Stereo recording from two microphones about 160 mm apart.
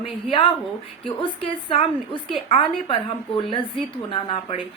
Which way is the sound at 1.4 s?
35° left (ahead or behind).